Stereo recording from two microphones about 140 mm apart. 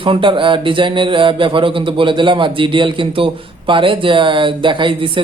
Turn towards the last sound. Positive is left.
turn(degrees=-35)  # may be behind; listen again after turning